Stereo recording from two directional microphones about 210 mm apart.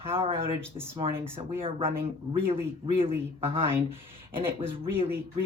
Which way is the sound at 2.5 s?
25° right (ahead or behind).